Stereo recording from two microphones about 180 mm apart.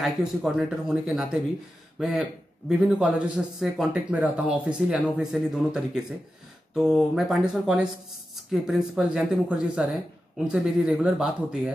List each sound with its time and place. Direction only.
0.0 s speech: centre (ahead or behind)